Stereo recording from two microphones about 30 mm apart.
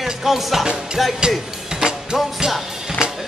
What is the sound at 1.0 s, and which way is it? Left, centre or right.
Music, centre.